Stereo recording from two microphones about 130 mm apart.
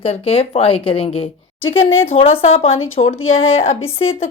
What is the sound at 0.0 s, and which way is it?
Speech, 50° left (ahead or behind).